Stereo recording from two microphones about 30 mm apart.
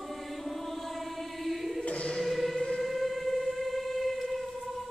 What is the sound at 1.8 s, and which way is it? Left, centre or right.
Choir, left.